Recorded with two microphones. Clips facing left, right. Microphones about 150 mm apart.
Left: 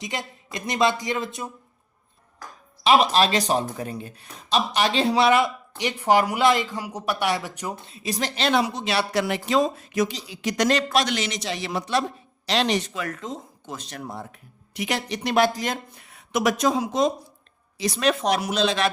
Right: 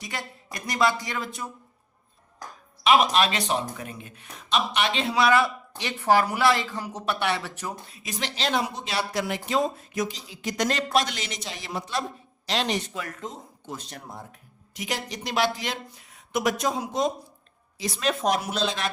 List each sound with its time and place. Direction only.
0.0 s speech: 20° left (ahead or behind)
2.8 s speech: 30° left (ahead or behind); by 7.9 s 15° left (ahead or behind)
7.9 s speech: 35° left (ahead or behind)
8.4 s speech: 75° left (ahead or behind)
12.5 s speech: 85° left
17.7 s speech: 80° left